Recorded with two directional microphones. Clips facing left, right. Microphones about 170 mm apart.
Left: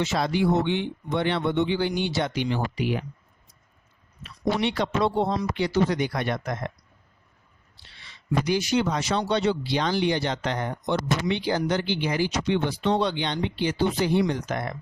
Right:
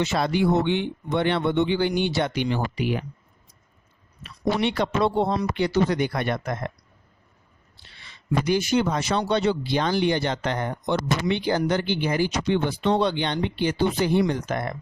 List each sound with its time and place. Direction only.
0.0 s speech: 60° right (ahead or behind)
4.6 s speech: 55° right (ahead or behind)
7.8 s a man's voice: 50° right (ahead or behind)